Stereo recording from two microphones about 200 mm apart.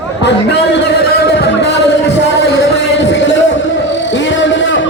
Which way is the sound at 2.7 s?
65° left (ahead or behind).